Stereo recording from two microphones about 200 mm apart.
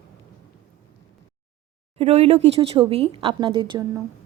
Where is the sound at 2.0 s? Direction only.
30° right (ahead or behind).